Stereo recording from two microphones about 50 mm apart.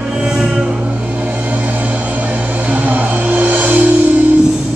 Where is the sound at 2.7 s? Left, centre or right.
Right.